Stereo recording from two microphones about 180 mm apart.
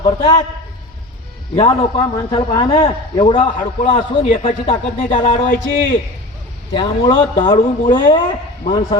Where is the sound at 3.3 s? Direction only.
35° left (ahead or behind).